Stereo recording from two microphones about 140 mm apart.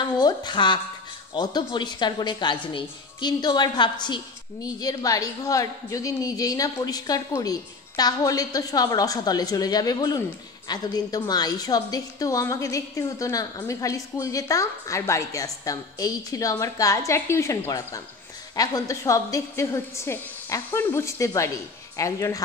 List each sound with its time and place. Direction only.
0.0 s a woman's voice: 30° left (ahead or behind)